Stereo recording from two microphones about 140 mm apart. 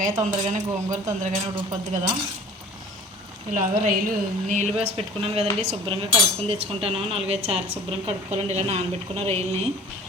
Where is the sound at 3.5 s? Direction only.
70° right (ahead or behind).